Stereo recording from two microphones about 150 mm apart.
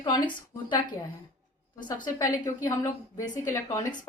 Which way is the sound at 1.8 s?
30° left (ahead or behind).